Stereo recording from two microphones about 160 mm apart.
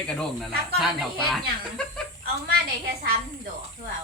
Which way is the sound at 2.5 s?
90° right.